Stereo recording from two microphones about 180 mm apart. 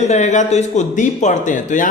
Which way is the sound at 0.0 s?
40° left (ahead or behind).